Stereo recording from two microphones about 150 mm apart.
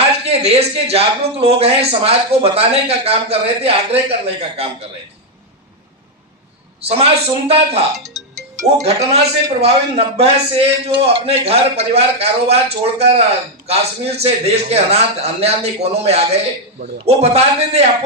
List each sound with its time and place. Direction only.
0.3 s a man's voice: 40° right (ahead or behind)
6.8 s a man's voice: 40° right (ahead or behind)